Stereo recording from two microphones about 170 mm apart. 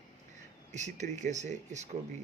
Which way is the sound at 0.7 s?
45° right (ahead or behind).